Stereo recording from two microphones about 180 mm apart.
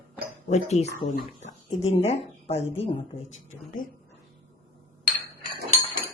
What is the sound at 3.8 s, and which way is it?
Speech, 50° left (ahead or behind).